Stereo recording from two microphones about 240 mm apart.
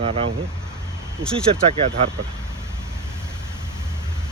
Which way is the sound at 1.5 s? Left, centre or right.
Right.